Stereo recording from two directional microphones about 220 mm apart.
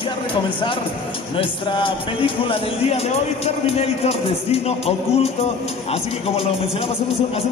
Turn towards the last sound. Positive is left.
turn(degrees=25)  # may be behind; listen again after turning